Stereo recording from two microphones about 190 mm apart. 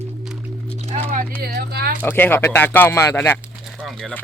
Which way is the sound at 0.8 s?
35° right (ahead or behind).